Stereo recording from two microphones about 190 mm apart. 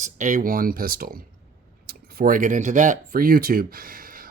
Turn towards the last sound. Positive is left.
turn(degrees=-50)  # may be behind; listen again after turning